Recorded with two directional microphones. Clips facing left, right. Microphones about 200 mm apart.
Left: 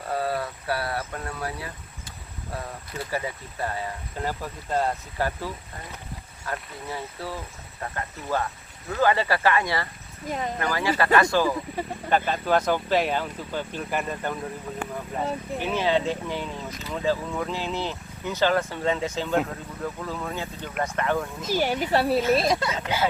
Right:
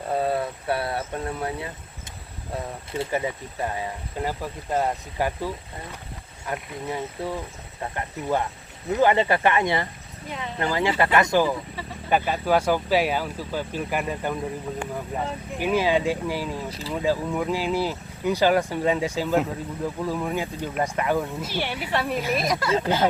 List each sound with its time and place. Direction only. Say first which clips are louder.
0.1 s a sound: right 3 dB; 20° right (ahead or behind)
2.9 s speech: right 4 dB; 25° right (ahead or behind)
10.2 s speech: left 4 dB; 40° left (ahead or behind)
10.6 s speech: right 4 dB; 20° right (ahead or behind)
11.8 s speech: left 5 dB; 45° left (ahead or behind)
12.1 s speech: right 1 dB; 10° right (ahead or behind)
15.5 s speech: right 3 dB; 10° right (ahead or behind)
21.6 s speech: left 4 dB; 40° left (ahead or behind)
22.4 s speech: left 2 dB; 25° left (ahead or behind)